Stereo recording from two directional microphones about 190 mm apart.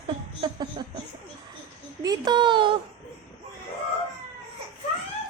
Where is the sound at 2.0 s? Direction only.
25° right (ahead or behind).